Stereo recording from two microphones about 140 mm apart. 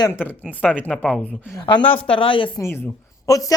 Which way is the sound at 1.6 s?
35° left (ahead or behind).